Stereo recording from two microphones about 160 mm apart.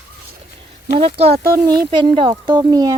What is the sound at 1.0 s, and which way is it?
Speech, 40° right (ahead or behind).